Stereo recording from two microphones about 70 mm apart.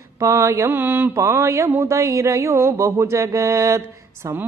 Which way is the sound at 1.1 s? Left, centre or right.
Right.